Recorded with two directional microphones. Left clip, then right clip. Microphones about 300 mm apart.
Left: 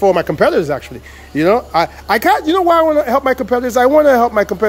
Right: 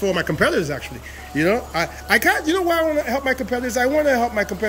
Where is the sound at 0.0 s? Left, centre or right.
Centre.